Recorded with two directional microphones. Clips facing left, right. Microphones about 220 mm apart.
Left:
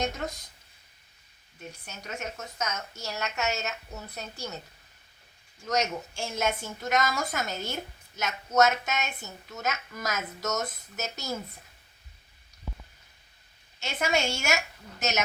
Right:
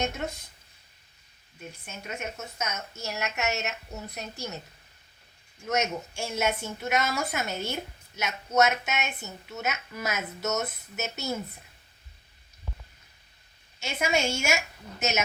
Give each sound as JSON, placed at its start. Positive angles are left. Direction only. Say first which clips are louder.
{"t": 1.8, "sound": "a woman's voice", "louder": "right 1 dB", "side_deg": 0}
{"t": 5.6, "sound": "speech", "louder": "even", "side_deg": -5}
{"t": 13.8, "sound": "speech", "louder": "right 1 dB", "side_deg": 0}